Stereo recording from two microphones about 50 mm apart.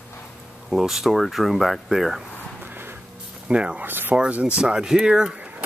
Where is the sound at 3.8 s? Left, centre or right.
Right.